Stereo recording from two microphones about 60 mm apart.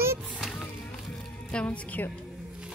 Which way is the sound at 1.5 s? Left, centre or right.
Left.